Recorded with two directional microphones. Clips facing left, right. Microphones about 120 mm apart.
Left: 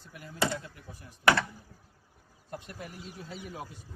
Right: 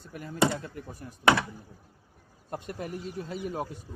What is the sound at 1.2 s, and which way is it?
Speech, 15° right (ahead or behind).